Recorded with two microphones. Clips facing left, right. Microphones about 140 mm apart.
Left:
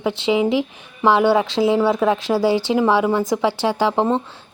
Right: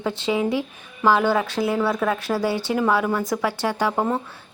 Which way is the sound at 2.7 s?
20° left (ahead or behind).